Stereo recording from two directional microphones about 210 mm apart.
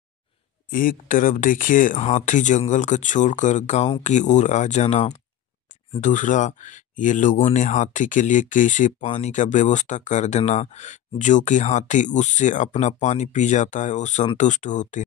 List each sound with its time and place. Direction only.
0.7 s speech: 40° left (ahead or behind)
7.3 s speech: 25° left (ahead or behind)
7.6 s speech: 35° left (ahead or behind)